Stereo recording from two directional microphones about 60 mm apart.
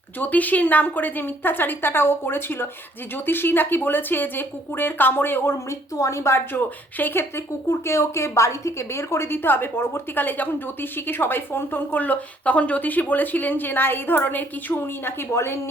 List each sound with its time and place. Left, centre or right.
0.2 s speech: left
6.0 s speech: left
7.0 s speech: left
7.7 s a woman's voice: left